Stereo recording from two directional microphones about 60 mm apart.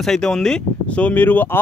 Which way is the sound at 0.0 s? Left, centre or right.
Centre.